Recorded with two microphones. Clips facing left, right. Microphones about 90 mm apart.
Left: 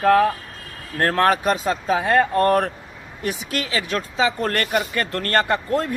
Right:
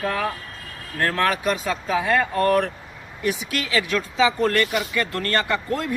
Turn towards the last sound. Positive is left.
turn(degrees=40)  # may be behind; listen again after turning